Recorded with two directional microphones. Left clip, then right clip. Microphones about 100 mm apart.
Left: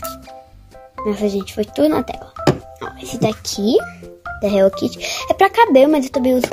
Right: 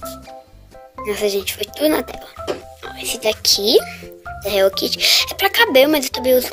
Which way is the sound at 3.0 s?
15° left (ahead or behind).